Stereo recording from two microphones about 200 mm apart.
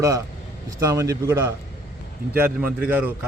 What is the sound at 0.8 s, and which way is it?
A man's voice, 15° right (ahead or behind).